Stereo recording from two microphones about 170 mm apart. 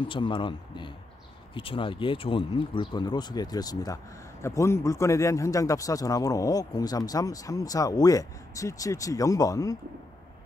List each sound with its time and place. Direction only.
0.0 s speech: 30° left (ahead or behind)